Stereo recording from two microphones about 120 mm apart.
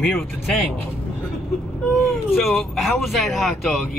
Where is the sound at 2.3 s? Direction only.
Centre (ahead or behind).